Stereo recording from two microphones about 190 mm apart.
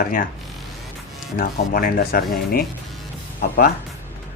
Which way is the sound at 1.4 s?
50° left (ahead or behind).